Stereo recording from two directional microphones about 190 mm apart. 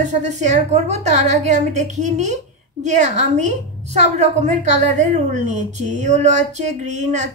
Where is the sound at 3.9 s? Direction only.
35° right (ahead or behind).